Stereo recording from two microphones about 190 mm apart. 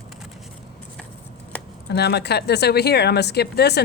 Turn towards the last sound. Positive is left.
turn(degrees=60)  # may be behind; listen again after turning